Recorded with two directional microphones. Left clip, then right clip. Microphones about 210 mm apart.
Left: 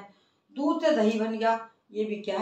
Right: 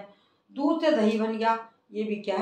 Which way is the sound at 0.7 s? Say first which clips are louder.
Even; 20° right (ahead or behind).